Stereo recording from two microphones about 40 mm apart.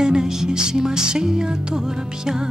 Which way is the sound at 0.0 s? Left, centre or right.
Centre.